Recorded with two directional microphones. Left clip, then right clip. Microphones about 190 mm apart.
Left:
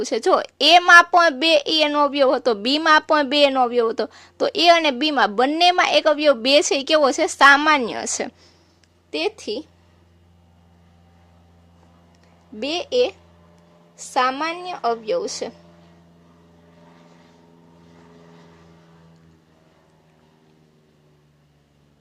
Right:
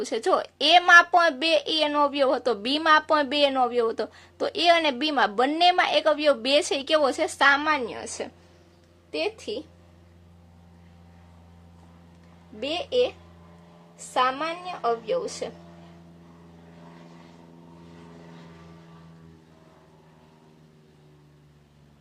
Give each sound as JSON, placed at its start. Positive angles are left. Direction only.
{"t": 0.0, "sound": "a woman's voice", "side_deg": 30}
{"t": 12.5, "sound": "a woman's voice", "side_deg": 60}